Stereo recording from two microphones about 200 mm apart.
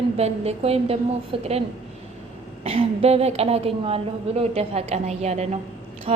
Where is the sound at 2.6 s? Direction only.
30° right (ahead or behind).